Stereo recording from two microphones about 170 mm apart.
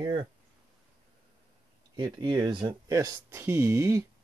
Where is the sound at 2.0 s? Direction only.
25° right (ahead or behind).